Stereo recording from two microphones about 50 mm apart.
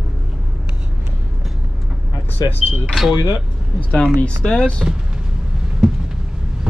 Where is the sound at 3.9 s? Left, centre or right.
Left.